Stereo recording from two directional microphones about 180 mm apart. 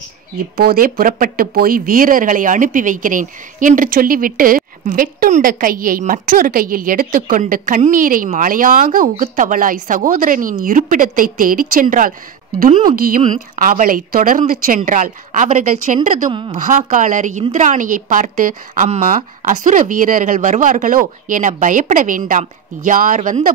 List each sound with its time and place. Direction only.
0.6 s speech: 55° right (ahead or behind)
16.3 s speech: 25° right (ahead or behind)
16.5 s speech: 45° right (ahead or behind)